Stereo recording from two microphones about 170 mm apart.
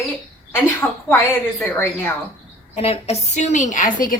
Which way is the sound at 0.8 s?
10° left (ahead or behind).